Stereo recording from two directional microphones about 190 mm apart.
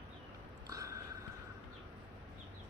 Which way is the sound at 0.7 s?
15° right (ahead or behind).